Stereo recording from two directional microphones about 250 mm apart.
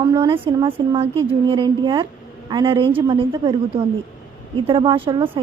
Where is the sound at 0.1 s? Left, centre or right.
Centre.